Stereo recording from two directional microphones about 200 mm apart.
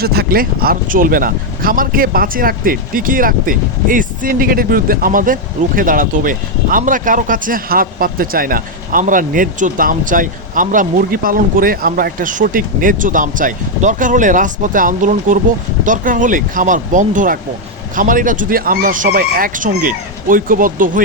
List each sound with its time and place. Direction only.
0.0 s speech: 50° right (ahead or behind)